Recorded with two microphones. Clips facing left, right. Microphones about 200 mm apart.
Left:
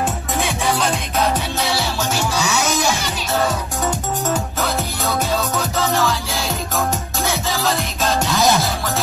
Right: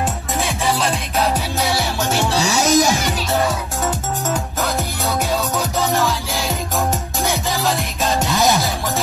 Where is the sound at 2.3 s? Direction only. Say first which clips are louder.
Right 2 dB; 35° right (ahead or behind).